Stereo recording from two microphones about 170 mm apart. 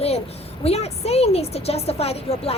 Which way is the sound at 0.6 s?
35° left (ahead or behind).